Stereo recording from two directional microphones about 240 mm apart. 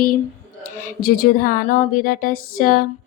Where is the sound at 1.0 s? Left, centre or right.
Left.